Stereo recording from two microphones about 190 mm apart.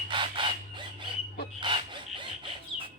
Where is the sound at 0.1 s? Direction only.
25° right (ahead or behind).